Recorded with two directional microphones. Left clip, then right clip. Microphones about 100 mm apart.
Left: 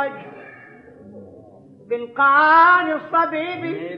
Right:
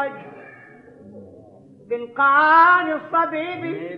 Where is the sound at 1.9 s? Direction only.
35° right (ahead or behind).